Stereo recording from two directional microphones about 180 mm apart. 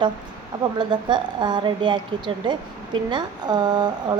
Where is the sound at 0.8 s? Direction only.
25° right (ahead or behind).